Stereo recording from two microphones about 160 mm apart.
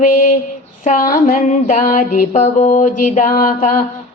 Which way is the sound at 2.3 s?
45° left (ahead or behind).